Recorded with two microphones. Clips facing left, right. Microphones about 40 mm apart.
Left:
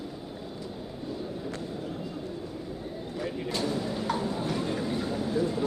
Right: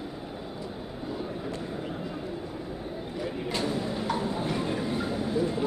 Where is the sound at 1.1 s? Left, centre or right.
Right.